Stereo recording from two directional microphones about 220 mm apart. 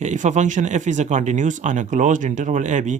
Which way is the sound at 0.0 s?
35° right (ahead or behind).